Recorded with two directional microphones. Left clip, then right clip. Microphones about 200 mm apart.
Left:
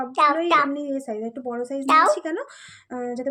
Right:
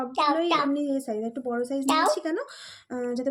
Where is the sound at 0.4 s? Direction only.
20° left (ahead or behind).